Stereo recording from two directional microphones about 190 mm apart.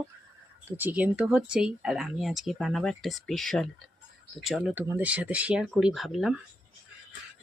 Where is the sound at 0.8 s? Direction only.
10° right (ahead or behind).